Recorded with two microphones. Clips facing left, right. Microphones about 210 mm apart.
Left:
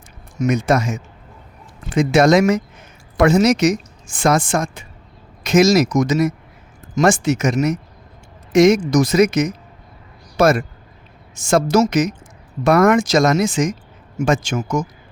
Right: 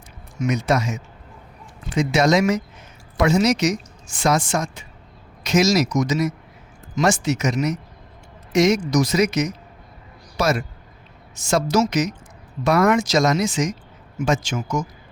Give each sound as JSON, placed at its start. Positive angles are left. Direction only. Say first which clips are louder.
{"t": 0.3, "sound": "a woman's voice", "louder": "left 4 dB", "side_deg": 50}